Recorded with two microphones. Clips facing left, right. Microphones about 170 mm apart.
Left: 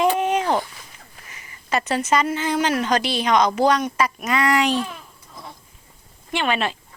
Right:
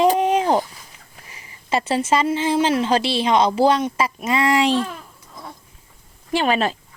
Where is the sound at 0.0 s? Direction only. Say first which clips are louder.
Right 3 dB; 30° right (ahead or behind).